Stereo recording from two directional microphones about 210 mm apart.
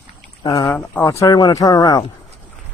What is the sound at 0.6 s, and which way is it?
Speech, 5° left (ahead or behind).